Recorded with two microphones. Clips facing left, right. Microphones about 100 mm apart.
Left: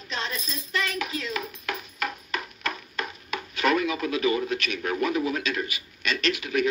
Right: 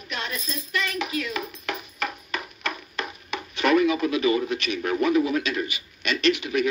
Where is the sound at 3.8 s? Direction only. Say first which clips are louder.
Right 3 dB; 25° right (ahead or behind).